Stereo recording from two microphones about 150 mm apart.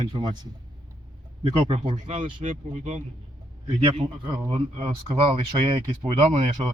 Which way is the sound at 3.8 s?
35° right (ahead or behind).